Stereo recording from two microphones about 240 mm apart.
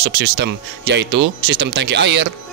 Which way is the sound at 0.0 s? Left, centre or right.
Right.